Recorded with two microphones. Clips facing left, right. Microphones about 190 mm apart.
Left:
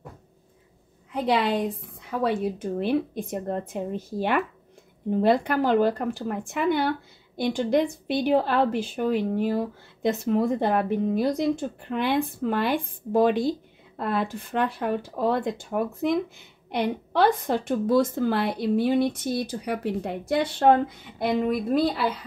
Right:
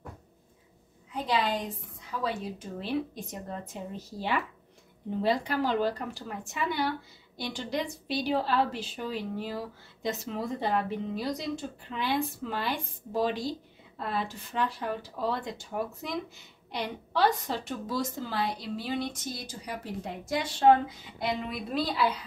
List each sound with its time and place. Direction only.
1.1 s a woman's voice: 65° left (ahead or behind); by 22.0 s 50° left (ahead or behind)